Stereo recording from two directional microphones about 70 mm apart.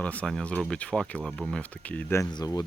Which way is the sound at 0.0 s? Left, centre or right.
Centre.